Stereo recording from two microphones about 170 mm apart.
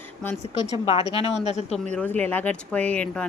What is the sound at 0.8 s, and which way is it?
Speech, 35° left (ahead or behind).